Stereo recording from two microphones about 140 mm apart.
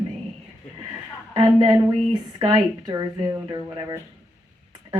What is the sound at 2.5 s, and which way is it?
A woman's voice, 30° right (ahead or behind).